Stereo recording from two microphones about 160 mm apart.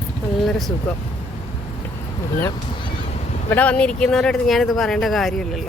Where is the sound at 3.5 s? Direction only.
10° left (ahead or behind).